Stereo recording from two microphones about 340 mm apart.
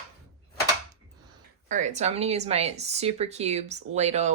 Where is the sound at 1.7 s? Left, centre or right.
Right.